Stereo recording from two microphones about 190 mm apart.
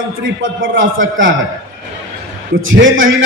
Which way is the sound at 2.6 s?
90° right.